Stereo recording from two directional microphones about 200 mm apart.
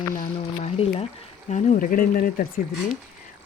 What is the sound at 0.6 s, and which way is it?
Speech, 30° left (ahead or behind).